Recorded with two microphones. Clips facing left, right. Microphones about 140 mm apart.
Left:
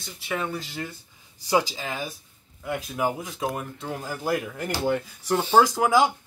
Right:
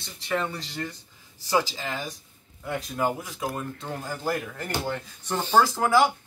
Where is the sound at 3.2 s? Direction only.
20° left (ahead or behind).